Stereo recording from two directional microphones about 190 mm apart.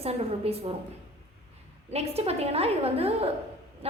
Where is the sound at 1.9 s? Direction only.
35° right (ahead or behind).